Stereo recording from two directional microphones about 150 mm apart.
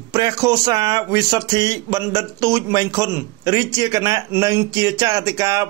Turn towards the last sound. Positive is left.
turn(degrees=-20)  # may be behind; listen again after turning